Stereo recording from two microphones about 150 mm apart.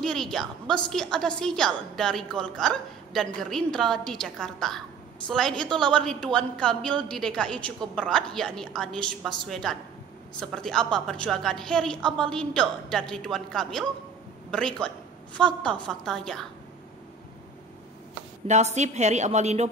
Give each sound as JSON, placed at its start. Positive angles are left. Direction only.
{"t": 0.0, "sound": "a woman's voice", "side_deg": 5}
{"t": 18.5, "sound": "a woman's voice", "side_deg": -50}